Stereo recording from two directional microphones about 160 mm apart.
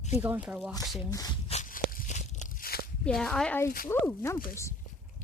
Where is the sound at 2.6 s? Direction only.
70° left (ahead or behind).